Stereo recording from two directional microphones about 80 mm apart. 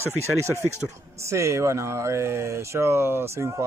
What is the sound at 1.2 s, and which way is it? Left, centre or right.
Speech, right.